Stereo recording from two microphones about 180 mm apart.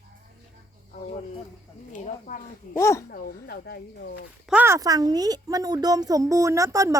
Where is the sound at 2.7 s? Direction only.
15° left (ahead or behind).